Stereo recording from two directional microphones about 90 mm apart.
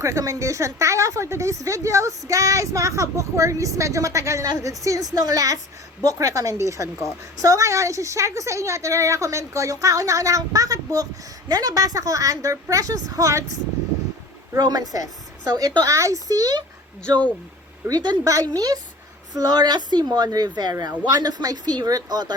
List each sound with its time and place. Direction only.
0.0 s a woman's voice: 35° right (ahead or behind)
14.5 s speech: 45° right (ahead or behind)
17.8 s speech: 50° right (ahead or behind)